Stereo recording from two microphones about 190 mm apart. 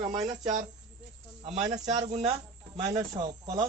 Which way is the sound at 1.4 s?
35° right (ahead or behind).